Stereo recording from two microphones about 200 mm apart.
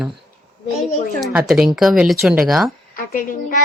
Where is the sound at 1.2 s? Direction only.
Centre (ahead or behind).